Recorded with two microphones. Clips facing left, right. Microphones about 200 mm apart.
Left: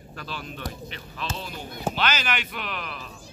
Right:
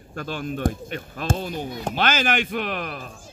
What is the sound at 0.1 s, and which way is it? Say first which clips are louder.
Speech: right 8 dB; 50° right (ahead or behind).